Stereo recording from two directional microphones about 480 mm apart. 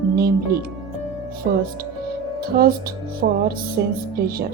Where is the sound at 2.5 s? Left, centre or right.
Centre.